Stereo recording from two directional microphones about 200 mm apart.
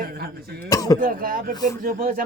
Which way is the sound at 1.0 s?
45° right (ahead or behind).